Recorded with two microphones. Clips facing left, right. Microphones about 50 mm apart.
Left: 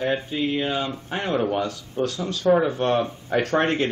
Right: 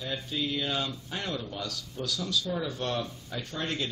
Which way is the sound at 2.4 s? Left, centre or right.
Left.